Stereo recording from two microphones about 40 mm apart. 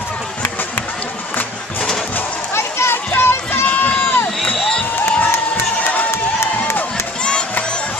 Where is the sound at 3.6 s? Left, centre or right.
Left.